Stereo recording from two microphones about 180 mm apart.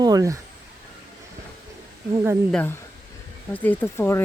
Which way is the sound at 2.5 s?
10° left (ahead or behind).